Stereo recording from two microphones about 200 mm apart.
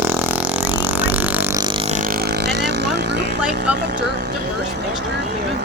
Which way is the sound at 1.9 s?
45° right (ahead or behind).